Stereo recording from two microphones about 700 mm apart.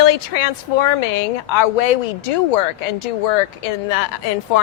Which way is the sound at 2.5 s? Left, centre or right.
Left.